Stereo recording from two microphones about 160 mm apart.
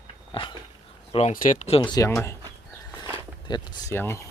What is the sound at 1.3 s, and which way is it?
Speech, 55° left (ahead or behind).